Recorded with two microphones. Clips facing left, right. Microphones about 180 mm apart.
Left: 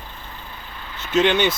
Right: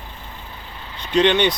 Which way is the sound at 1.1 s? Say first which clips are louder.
Right 1 dB; 5° left (ahead or behind).